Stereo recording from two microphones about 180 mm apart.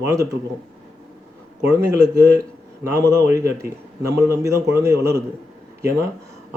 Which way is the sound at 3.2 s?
15° right (ahead or behind).